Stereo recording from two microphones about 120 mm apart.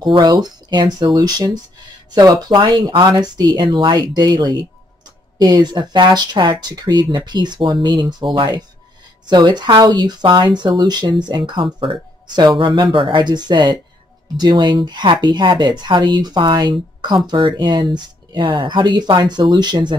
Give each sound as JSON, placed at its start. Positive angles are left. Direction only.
{"t": 0.0, "sound": "speech", "side_deg": -40}